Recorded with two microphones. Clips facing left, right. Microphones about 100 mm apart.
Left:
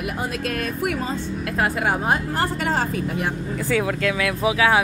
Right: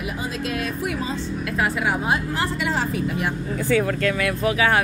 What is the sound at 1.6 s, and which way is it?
Speech, 45° left (ahead or behind).